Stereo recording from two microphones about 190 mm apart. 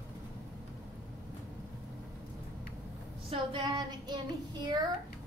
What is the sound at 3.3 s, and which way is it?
Child singing, 25° right (ahead or behind).